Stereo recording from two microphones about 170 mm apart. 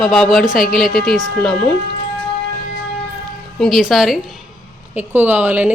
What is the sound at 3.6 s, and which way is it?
A woman's voice, centre (ahead or behind).